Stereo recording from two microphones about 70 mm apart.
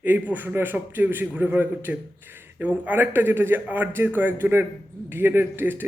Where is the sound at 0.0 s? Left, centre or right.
Right.